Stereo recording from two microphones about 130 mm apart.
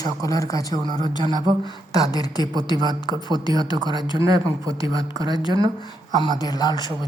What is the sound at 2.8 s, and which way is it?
A man's voice, 30° right (ahead or behind).